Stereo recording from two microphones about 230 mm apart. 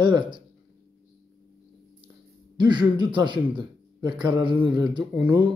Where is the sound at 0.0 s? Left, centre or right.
Centre.